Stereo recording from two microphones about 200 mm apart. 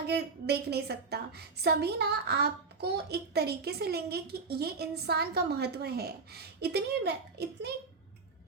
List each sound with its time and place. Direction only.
0.1 s a woman's voice: 55° right (ahead or behind)